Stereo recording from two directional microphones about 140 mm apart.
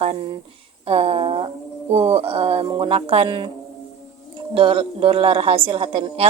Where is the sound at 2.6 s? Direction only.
35° right (ahead or behind).